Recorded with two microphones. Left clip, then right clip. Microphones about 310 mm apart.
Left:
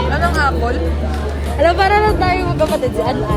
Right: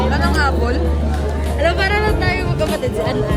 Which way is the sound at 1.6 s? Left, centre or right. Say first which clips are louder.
Left 5 dB; centre.